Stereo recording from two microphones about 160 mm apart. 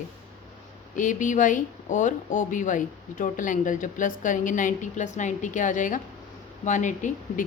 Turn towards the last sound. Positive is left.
turn(degrees=50)  # may be behind; listen again after turning